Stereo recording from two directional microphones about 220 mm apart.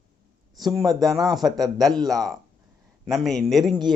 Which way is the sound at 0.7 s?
15° right (ahead or behind).